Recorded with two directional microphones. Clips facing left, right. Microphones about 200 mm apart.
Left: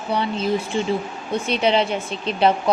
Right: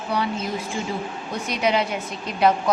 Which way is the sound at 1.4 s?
30° left (ahead or behind).